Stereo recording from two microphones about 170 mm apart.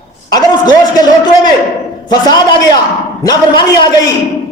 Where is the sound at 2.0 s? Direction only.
25° left (ahead or behind).